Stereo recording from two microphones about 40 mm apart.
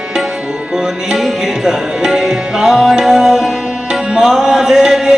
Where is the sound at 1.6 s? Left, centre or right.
Centre.